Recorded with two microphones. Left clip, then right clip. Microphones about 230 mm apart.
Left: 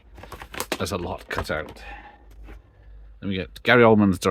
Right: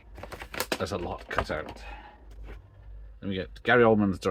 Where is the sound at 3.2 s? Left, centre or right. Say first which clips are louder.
Left 4 dB; left.